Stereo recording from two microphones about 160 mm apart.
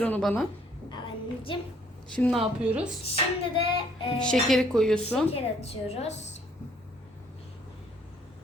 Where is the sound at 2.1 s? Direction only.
5° left (ahead or behind).